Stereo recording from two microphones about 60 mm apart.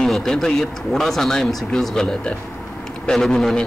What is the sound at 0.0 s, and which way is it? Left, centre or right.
Speech, centre.